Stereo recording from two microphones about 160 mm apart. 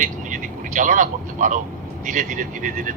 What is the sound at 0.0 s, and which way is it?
Vehicle, 55° right (ahead or behind).